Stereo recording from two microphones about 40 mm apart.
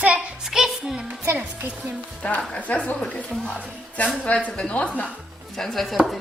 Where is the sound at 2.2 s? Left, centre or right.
Left.